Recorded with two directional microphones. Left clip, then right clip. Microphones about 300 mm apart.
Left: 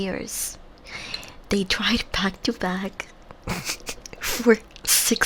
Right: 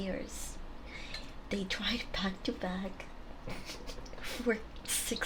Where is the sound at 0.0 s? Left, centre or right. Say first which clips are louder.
Left 10 dB; left.